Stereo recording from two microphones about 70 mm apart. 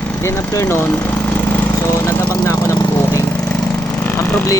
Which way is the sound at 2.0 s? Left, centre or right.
Left.